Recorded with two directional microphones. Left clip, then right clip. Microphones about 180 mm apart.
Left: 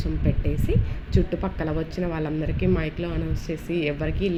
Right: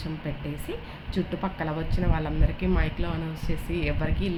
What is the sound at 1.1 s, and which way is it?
Speech, 10° left (ahead or behind).